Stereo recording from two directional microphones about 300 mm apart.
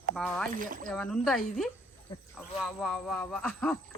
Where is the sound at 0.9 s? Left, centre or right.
Centre.